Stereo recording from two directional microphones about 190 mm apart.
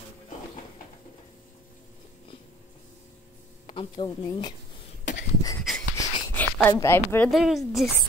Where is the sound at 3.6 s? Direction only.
25° left (ahead or behind).